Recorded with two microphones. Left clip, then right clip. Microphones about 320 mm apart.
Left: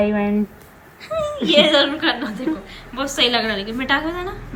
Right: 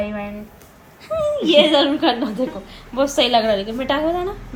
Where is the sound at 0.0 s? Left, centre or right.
Left.